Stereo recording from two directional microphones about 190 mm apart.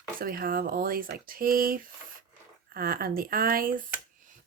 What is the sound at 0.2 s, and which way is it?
Speech, 50° right (ahead or behind).